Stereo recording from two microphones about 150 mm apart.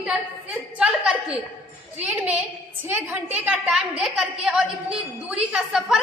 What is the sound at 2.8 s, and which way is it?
A woman's voice, 10° right (ahead or behind).